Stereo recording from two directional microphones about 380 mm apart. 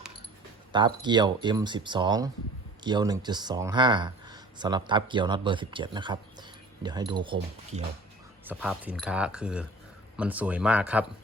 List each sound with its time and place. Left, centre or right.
0.7 s speech: centre
8.4 s speech: centre